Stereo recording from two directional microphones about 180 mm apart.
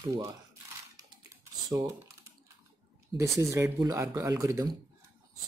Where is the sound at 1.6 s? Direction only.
20° right (ahead or behind).